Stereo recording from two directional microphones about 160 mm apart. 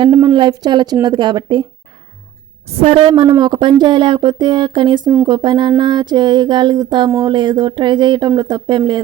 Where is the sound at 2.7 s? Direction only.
35° right (ahead or behind).